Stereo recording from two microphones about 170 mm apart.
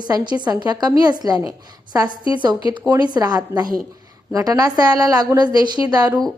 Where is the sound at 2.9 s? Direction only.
25° right (ahead or behind).